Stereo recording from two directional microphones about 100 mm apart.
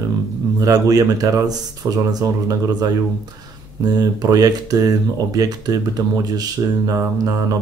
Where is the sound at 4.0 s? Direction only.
40° right (ahead or behind).